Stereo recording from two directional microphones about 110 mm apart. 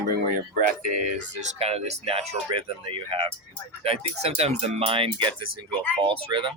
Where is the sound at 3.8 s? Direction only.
65° right (ahead or behind).